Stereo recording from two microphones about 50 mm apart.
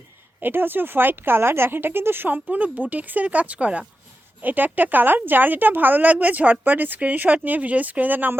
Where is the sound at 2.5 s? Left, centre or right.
Right.